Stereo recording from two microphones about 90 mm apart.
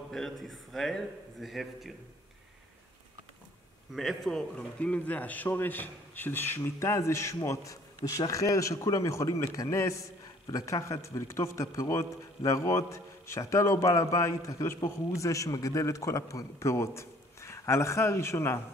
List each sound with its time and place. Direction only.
0.1 s a man's voice: centre (ahead or behind)
3.9 s a man's voice: centre (ahead or behind); by 18.6 s 30° left (ahead or behind)